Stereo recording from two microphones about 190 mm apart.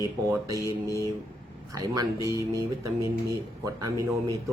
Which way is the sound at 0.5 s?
15° left (ahead or behind).